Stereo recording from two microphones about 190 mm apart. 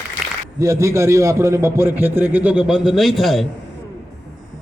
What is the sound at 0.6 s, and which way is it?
A man's voice, 15° right (ahead or behind).